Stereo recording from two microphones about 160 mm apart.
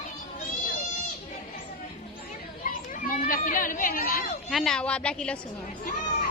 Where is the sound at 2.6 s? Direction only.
55° left (ahead or behind).